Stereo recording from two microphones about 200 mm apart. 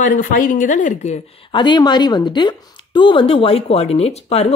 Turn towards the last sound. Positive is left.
turn(degrees=30)  # may be behind; listen again after turning